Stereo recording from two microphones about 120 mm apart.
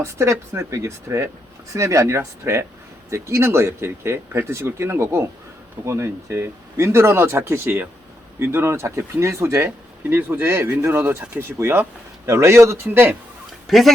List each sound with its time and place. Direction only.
0.0 s speech: 25° right (ahead or behind)
13.7 s speech: centre (ahead or behind)